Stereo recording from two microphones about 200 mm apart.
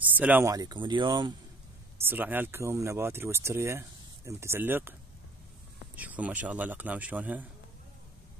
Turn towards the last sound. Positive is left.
turn(degrees=-10)  # may be behind; listen again after turning